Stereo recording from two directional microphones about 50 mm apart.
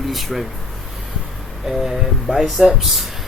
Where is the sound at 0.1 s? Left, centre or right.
Centre.